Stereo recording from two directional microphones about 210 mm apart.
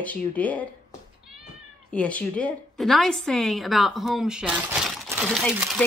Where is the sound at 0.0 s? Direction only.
5° left (ahead or behind).